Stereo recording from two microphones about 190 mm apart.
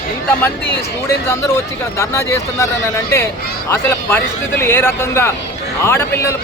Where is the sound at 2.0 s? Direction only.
15° left (ahead or behind).